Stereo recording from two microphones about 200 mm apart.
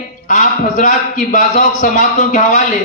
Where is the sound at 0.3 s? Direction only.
40° left (ahead or behind).